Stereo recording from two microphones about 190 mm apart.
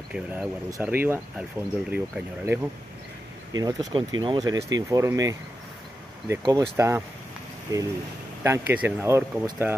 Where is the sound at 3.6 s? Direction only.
20° right (ahead or behind).